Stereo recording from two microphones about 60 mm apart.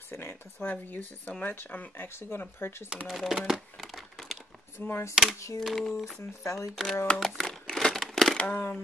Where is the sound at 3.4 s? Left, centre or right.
Centre.